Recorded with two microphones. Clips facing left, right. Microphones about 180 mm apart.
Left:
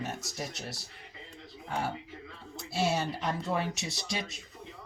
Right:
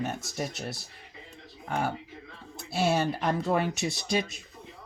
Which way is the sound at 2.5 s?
55° right (ahead or behind).